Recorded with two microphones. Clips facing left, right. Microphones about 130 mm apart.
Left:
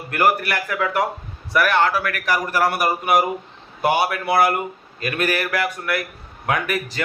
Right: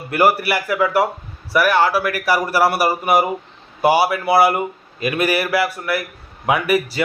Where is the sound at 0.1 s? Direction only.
10° right (ahead or behind).